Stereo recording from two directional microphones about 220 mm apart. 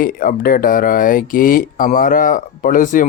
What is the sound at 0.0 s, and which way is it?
A man's voice, 40° left (ahead or behind).